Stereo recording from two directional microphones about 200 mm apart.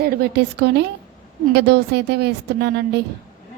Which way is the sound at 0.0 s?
55° right (ahead or behind).